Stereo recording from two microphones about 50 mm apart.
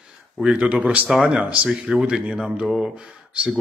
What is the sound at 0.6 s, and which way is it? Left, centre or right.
Speech, right.